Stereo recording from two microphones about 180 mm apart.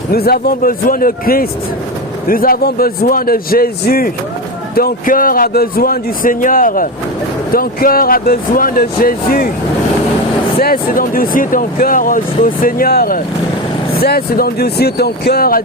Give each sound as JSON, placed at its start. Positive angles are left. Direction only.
{"t": 0.1, "sound": "a man's voice", "side_deg": 60}
{"t": 10.6, "sound": "a man's voice", "side_deg": 55}